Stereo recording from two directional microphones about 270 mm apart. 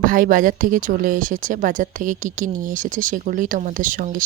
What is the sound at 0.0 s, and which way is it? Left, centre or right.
Speech, right.